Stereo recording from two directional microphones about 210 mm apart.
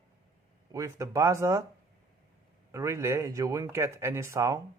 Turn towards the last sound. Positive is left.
turn(degrees=-15)  # may be behind; listen again after turning